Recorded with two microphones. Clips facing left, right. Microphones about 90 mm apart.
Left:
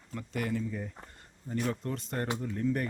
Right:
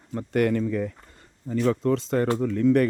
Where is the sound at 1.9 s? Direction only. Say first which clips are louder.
Right 11 dB; 90° right.